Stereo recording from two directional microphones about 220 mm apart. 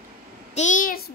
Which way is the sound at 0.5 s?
35° left (ahead or behind).